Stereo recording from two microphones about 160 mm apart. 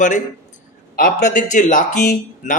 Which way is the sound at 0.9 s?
60° left (ahead or behind).